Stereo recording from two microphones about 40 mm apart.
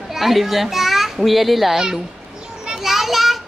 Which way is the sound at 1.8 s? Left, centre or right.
Centre.